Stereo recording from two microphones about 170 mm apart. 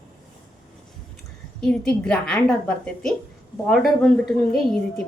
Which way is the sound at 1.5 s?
5° left (ahead or behind).